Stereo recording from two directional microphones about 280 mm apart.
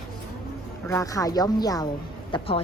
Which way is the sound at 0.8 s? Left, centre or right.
Centre.